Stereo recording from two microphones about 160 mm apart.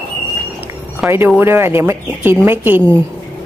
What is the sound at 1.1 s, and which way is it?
Speech, 15° right (ahead or behind).